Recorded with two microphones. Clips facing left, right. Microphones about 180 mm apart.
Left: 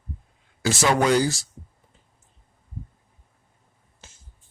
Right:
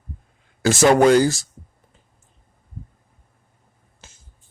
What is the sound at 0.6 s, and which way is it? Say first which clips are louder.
Speech: right 7 dB; 50° right (ahead or behind).